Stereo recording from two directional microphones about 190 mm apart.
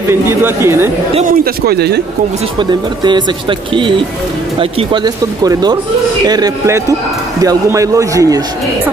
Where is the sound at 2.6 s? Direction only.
25° right (ahead or behind).